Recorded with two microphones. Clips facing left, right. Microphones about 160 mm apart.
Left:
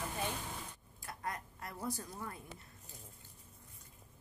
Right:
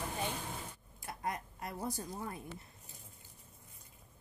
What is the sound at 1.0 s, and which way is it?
Speech, 20° right (ahead or behind).